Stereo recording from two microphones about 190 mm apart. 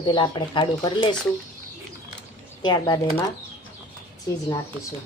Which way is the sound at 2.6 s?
20° left (ahead or behind).